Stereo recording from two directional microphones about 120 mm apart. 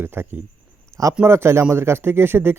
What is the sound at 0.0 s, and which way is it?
Speech, 20° right (ahead or behind).